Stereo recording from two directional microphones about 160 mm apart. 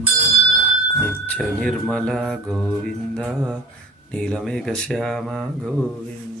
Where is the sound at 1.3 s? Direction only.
5° left (ahead or behind).